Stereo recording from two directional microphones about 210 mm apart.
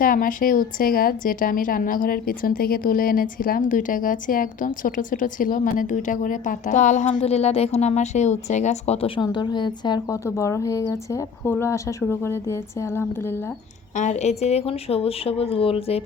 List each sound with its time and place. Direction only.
0.0 s a woman's voice: 40° left (ahead or behind); by 13.3 s 10° left (ahead or behind)
13.9 s a woman's voice: 35° left (ahead or behind)